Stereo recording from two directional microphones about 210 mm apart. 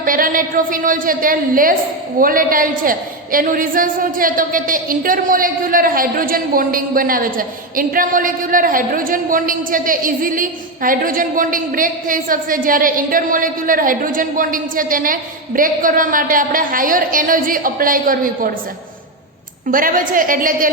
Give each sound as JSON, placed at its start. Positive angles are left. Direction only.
{"t": 0.0, "sound": "a woman's voice", "side_deg": -40}
{"t": 19.7, "sound": "a woman's voice", "side_deg": -40}